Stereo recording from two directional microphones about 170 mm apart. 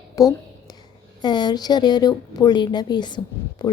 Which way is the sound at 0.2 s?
20° left (ahead or behind).